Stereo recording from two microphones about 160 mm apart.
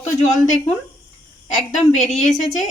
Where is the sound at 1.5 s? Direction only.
45° left (ahead or behind).